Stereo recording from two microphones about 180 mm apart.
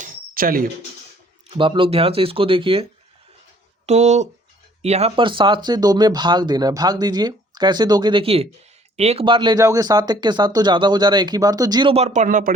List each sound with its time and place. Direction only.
0.0 s a sound: 50° right (ahead or behind)
1.5 s speech: 30° right (ahead or behind)
3.8 s speech: 40° right (ahead or behind)